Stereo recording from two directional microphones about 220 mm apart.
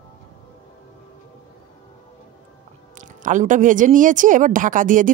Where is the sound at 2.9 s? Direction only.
35° right (ahead or behind).